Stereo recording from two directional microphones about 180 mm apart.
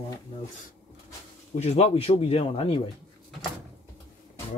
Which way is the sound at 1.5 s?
35° left (ahead or behind).